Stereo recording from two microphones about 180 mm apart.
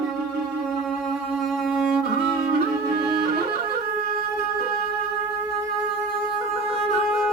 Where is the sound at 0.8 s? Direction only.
5° right (ahead or behind).